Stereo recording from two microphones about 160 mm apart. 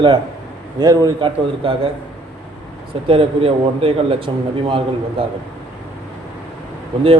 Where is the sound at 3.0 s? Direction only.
35° right (ahead or behind).